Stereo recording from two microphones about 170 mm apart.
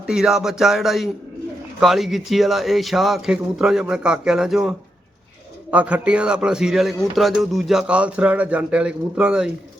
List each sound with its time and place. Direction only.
0.0 s a man's voice: 5° right (ahead or behind)
5.7 s a man's voice: 10° right (ahead or behind)